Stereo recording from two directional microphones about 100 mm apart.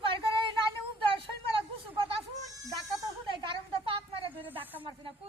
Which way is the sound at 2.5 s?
35° right (ahead or behind).